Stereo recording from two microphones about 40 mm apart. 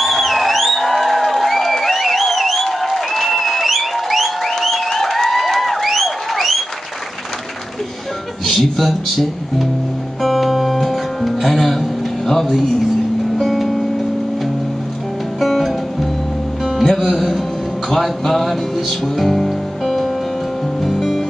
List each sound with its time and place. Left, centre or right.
0.0 s music: centre
8.5 s speech: centre
10.2 s music: centre
15.4 s music: centre
16.8 s speech: centre
17.8 s music: centre